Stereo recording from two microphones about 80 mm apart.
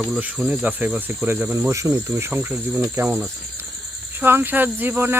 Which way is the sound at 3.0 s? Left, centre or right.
Centre.